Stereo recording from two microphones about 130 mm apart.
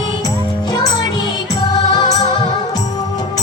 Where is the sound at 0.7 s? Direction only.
30° left (ahead or behind).